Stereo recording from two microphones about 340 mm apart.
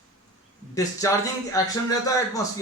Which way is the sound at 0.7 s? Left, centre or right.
Centre.